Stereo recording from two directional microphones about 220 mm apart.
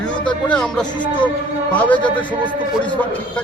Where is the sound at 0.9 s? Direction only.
20° left (ahead or behind).